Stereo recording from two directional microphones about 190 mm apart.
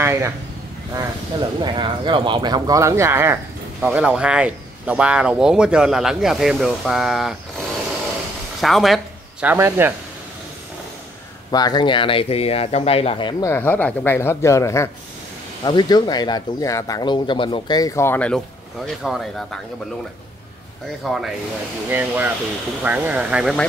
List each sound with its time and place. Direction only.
0.0 s a sound: 15° right (ahead or behind)
0.9 s speech: 25° right (ahead or behind); by 7.3 s centre (ahead or behind)
8.5 s speech: centre (ahead or behind)
11.5 s speech: 20° left (ahead or behind); by 19.6 s centre (ahead or behind)
21.0 s speech: centre (ahead or behind)